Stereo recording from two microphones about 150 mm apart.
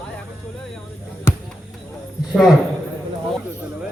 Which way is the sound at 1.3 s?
15° left (ahead or behind).